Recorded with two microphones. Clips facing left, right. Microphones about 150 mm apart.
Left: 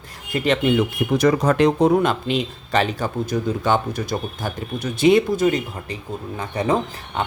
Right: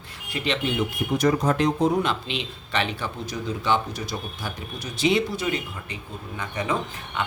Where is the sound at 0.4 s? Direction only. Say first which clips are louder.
Left 7 dB; 50° left (ahead or behind).